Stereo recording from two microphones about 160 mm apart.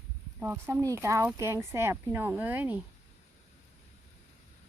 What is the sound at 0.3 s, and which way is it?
Speech, 15° right (ahead or behind).